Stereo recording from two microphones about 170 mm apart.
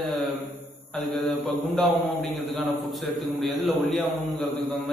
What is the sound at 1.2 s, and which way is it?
Mantra, centre (ahead or behind).